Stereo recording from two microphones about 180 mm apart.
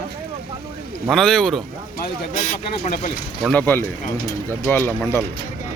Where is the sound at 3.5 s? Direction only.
10° left (ahead or behind).